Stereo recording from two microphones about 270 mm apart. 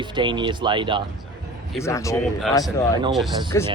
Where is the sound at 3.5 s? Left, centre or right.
Centre.